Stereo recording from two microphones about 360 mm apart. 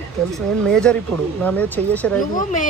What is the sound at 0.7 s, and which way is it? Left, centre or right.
Speech, centre.